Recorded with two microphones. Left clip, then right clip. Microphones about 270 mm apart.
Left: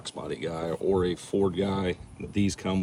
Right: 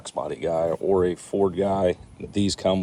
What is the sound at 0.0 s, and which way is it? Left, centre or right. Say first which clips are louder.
Speech: right 6 dB; centre.